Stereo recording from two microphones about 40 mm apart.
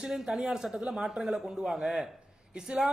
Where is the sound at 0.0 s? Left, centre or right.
Centre.